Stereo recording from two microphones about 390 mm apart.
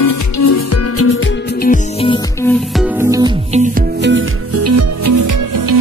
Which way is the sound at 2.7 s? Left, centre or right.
Centre.